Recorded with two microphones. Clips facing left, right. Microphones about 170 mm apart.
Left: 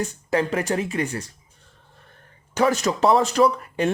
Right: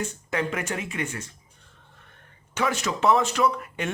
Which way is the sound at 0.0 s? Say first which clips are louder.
Left 5 dB; 35° left (ahead or behind).